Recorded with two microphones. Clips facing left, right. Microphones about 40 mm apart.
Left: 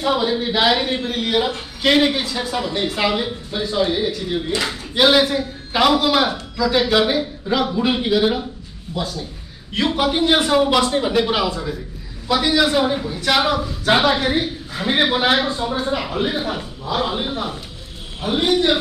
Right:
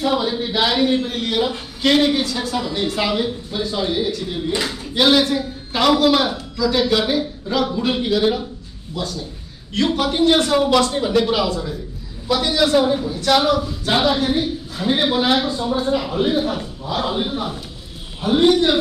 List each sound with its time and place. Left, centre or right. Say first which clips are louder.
0.0 s a woman's voice: left 1 dB; centre
15.7 s speech: right 2 dB; centre